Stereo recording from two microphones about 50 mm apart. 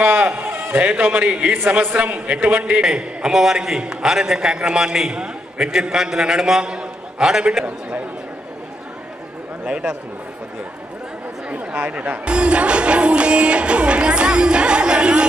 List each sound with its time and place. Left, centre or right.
0.0 s a man's voice: right
0.4 s a sound: right
0.7 s a man's voice: right
3.0 s a man's voice: centre
9.7 s speech: centre
11.5 s speech: right